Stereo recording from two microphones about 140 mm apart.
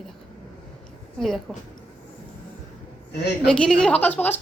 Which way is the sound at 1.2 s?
Centre (ahead or behind).